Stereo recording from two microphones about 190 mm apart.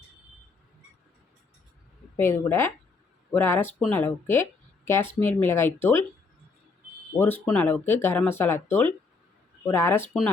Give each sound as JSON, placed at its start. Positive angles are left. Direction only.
{"t": 2.1, "sound": "speech", "side_deg": 10}
{"t": 7.4, "sound": "speech", "side_deg": 10}
{"t": 10.1, "sound": "speech", "side_deg": 0}